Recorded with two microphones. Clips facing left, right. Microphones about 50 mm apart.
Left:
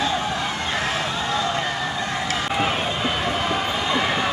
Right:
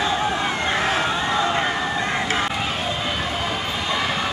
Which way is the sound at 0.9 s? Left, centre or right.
Right.